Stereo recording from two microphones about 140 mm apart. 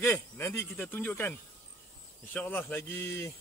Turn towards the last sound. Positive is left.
turn(degrees=20)  # may be behind; listen again after turning